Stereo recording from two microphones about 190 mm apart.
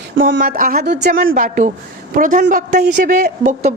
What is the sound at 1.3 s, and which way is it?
A woman's voice, 45° right (ahead or behind).